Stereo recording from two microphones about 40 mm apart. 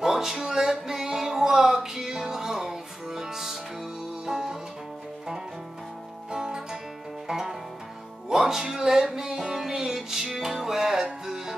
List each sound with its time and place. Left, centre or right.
0.0 s music: centre
6.3 s music: centre